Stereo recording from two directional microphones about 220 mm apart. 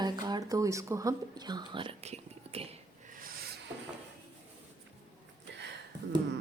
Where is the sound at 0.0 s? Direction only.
20° right (ahead or behind).